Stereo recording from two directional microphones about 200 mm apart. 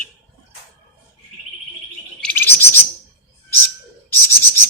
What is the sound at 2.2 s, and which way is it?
Bird, 10° left (ahead or behind).